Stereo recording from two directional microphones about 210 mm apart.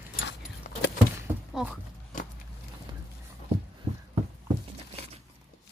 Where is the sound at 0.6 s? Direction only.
35° left (ahead or behind).